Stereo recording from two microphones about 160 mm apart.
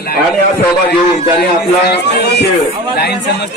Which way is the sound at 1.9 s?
90° left.